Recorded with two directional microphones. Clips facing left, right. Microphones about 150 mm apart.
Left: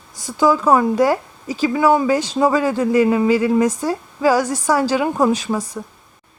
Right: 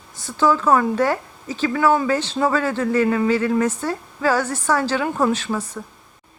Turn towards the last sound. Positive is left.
turn(degrees=10)  # may be behind; listen again after turning